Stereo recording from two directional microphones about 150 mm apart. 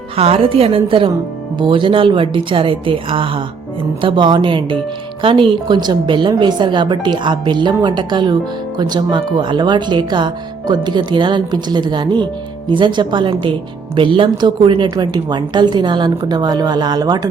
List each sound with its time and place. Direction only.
0.2 s speech: 40° right (ahead or behind)